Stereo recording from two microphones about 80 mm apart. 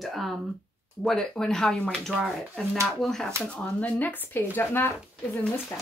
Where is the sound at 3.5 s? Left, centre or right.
Centre.